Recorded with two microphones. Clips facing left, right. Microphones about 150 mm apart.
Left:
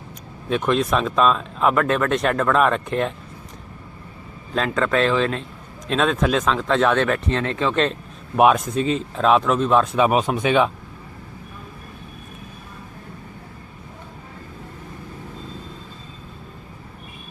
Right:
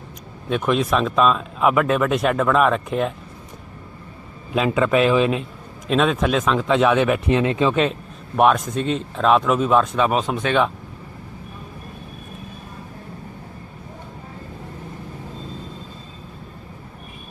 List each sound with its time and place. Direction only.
0.5 s speech: centre (ahead or behind)
4.5 s speech: 10° right (ahead or behind)
8.4 s speech: centre (ahead or behind)